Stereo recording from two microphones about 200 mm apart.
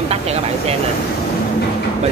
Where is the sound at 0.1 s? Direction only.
30° right (ahead or behind).